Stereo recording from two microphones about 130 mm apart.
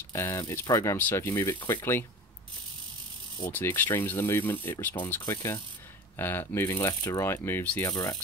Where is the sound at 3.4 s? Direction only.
20° left (ahead or behind).